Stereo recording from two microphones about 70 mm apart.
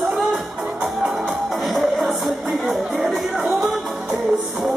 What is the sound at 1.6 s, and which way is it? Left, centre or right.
Music, centre.